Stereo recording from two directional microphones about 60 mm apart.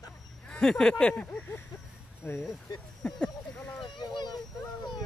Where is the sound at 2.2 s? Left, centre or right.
Left.